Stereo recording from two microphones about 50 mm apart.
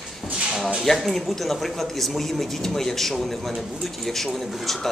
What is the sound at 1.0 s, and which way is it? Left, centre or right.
Speech, centre.